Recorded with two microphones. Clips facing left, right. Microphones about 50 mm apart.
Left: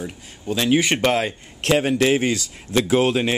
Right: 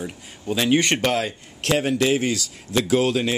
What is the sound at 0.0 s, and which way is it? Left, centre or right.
Speech, centre.